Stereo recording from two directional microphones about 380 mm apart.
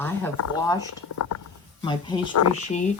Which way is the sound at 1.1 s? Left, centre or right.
Left.